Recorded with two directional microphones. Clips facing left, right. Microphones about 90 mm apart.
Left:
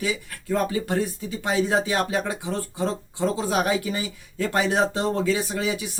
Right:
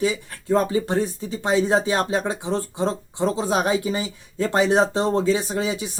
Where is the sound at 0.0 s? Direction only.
30° right (ahead or behind).